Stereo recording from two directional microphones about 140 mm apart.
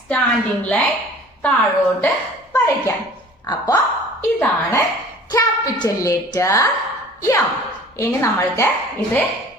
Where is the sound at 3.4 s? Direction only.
30° left (ahead or behind).